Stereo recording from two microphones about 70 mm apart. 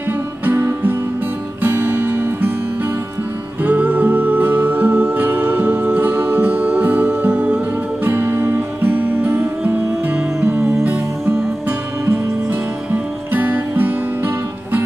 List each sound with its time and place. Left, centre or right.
0.5 s music: right
3.6 s music: right
12.9 s music: right